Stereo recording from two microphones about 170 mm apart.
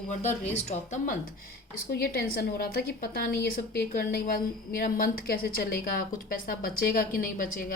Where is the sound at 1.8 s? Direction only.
60° left (ahead or behind).